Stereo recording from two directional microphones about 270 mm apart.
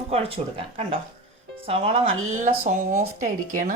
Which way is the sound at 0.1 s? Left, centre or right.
Right.